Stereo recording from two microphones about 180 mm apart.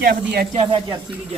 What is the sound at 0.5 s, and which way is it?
Speech, 35° right (ahead or behind).